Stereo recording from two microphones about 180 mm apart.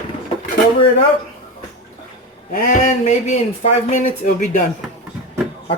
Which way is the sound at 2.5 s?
50° left (ahead or behind).